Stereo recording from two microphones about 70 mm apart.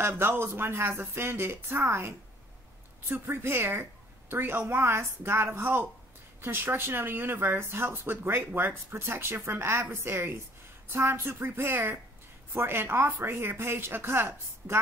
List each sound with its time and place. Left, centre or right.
0.2 s speech: right